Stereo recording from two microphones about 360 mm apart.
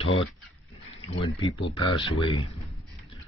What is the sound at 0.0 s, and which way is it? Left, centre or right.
Speech, centre.